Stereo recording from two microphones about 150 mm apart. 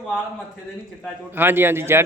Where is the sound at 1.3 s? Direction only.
15° right (ahead or behind).